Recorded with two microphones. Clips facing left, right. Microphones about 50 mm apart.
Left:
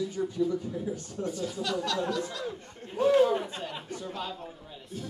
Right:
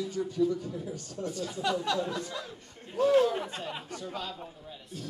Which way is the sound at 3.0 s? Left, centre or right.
Centre.